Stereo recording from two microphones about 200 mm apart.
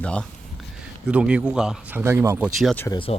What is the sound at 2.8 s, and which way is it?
Speech, 25° left (ahead or behind).